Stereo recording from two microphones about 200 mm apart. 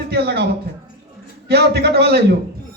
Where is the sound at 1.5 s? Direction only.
55° right (ahead or behind).